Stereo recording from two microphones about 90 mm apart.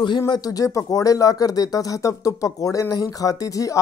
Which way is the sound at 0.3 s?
40° left (ahead or behind).